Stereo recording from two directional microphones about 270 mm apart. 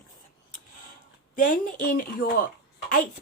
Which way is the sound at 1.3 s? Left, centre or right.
Left.